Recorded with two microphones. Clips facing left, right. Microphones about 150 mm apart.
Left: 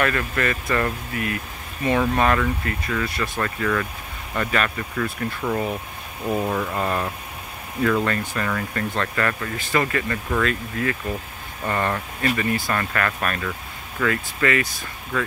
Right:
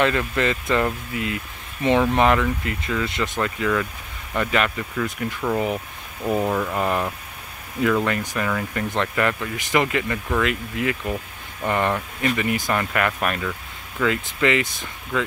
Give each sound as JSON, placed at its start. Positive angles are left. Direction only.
{"t": 0.0, "sound": "speech", "side_deg": -20}
{"t": 8.9, "sound": "speech", "side_deg": -15}
{"t": 13.4, "sound": "vehicle", "side_deg": -5}
{"t": 14.0, "sound": "speech", "side_deg": -20}